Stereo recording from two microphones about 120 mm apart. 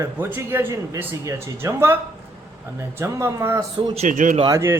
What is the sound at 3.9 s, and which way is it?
Speech, 80° right.